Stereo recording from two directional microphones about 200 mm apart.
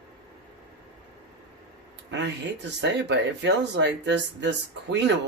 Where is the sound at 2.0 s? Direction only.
60° right (ahead or behind).